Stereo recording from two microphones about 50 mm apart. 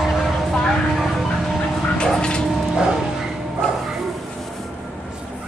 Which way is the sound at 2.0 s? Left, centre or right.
Centre.